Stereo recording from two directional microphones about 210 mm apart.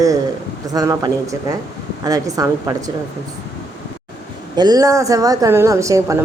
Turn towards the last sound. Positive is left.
turn(degrees=-15)  # may be behind; listen again after turning